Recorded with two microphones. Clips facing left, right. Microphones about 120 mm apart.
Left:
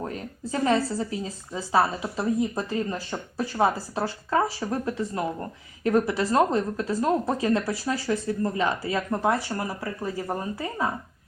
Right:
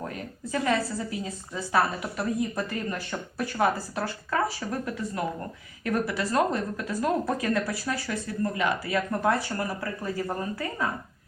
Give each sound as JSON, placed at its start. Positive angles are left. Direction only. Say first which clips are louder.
{"t": 0.0, "sound": "a woman's voice", "louder": "left 3 dB", "side_deg": 30}